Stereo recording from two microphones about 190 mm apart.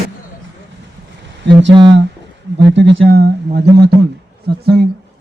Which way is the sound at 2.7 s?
70° right (ahead or behind).